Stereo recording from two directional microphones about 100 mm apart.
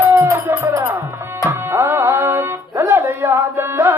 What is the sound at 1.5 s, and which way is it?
Music, 25° right (ahead or behind).